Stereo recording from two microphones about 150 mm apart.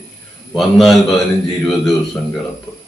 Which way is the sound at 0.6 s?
Centre (ahead or behind).